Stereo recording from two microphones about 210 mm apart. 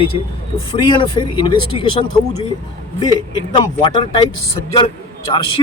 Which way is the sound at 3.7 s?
20° left (ahead or behind).